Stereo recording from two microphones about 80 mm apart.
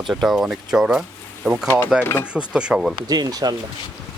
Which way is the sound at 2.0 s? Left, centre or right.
Left.